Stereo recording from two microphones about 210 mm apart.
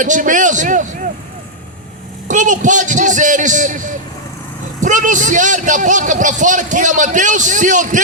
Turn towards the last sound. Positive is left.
turn(degrees=-35)  # may be behind; listen again after turning